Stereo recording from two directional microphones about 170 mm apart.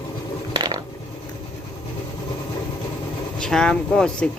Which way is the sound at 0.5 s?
25° right (ahead or behind).